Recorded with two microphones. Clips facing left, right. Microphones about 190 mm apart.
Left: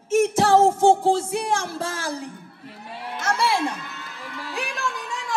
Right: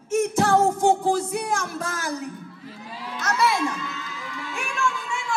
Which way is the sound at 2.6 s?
65° left (ahead or behind).